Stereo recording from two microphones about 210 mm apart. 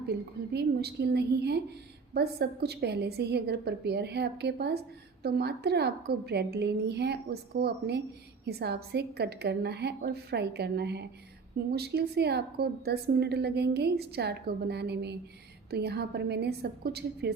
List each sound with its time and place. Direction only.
0.1 s a woman's voice: 50° right (ahead or behind)